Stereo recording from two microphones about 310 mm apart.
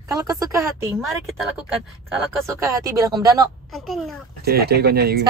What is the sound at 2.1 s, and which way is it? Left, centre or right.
Speech, centre.